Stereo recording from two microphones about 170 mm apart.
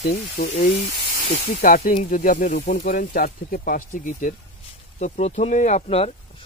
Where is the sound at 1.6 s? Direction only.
55° left (ahead or behind).